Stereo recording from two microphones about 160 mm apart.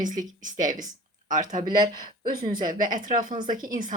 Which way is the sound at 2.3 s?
60° right (ahead or behind).